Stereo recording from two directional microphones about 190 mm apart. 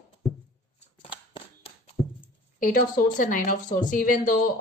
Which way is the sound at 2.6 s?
45° left (ahead or behind).